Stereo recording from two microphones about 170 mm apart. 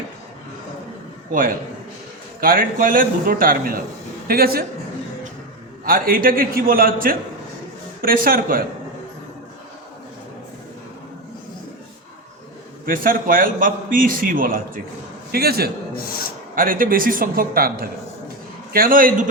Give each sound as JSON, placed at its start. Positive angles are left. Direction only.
{"t": 1.3, "sound": "a man's voice", "side_deg": -55}
{"t": 5.8, "sound": "a man's voice", "side_deg": -55}
{"t": 12.8, "sound": "a man's voice", "side_deg": -55}